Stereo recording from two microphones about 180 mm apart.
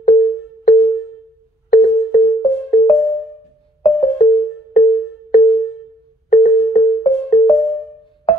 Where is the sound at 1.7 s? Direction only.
50° left (ahead or behind).